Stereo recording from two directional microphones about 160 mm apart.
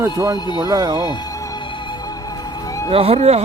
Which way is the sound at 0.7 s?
25° right (ahead or behind).